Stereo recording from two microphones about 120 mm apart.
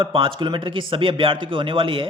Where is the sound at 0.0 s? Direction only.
45° right (ahead or behind).